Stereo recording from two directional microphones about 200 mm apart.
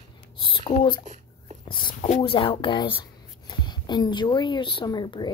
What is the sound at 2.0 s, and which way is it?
Speech, 30° left (ahead or behind).